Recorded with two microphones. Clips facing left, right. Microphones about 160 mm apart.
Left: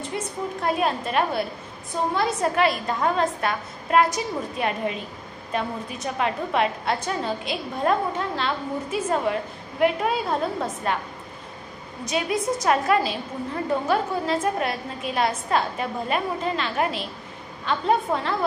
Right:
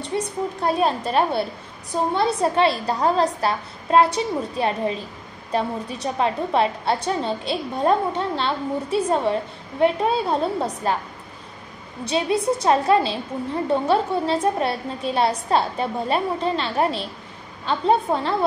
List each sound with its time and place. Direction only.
0.0 s a woman's voice: 30° right (ahead or behind)
12.0 s a woman's voice: 30° right (ahead or behind)